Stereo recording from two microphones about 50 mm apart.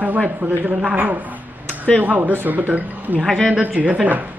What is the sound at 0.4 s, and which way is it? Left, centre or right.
Speech, right.